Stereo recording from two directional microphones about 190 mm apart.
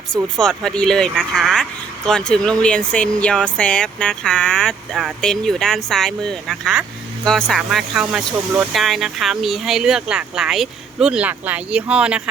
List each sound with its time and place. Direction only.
0.3 s speech: 5° left (ahead or behind)